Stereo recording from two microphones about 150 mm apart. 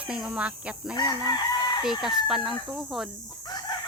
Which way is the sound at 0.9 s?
25° left (ahead or behind).